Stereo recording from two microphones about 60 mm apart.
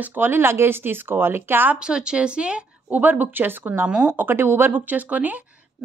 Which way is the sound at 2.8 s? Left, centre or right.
Right.